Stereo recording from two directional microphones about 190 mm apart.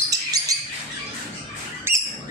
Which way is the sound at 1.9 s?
15° right (ahead or behind).